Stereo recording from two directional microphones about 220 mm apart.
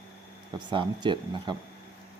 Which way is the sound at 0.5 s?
20° right (ahead or behind).